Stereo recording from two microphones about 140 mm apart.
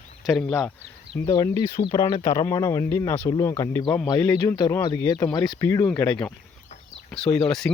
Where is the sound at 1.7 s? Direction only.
30° left (ahead or behind).